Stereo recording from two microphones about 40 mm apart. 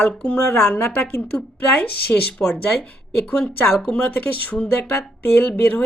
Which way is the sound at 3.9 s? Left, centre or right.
Left.